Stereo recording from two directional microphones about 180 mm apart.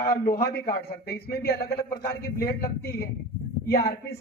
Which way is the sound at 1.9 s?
15° left (ahead or behind).